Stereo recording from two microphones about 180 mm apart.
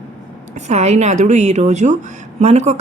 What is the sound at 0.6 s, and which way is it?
A woman's voice, 35° right (ahead or behind).